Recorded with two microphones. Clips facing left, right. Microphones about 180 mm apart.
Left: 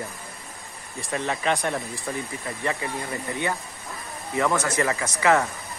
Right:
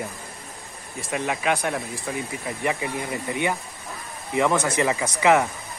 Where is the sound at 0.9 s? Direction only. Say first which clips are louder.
Right 1 dB; centre (ahead or behind).